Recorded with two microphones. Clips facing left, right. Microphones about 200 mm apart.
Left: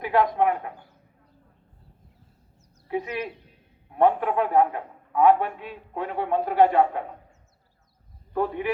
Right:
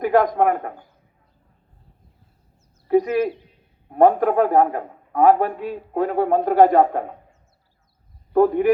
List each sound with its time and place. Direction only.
0.0 s a man's voice: 45° right (ahead or behind)
2.8 s a man's voice: 45° right (ahead or behind)
8.3 s a man's voice: 45° right (ahead or behind)